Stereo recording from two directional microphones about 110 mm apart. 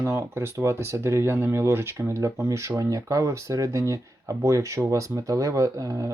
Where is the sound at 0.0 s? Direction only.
25° right (ahead or behind).